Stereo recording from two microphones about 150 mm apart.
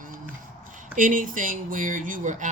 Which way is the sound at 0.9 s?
65° right (ahead or behind).